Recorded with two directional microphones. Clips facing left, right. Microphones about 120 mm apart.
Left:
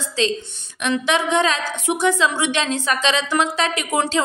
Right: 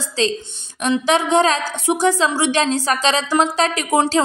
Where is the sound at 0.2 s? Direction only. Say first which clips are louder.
Right 1 dB; 35° right (ahead or behind).